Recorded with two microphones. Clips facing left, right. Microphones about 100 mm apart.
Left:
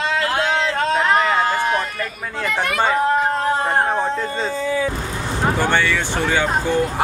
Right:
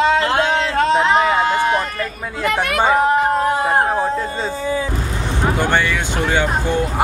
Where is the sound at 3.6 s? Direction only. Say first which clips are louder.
Right 2 dB; 5° right (ahead or behind).